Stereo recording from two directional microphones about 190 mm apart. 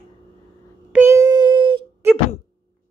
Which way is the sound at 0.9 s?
15° right (ahead or behind).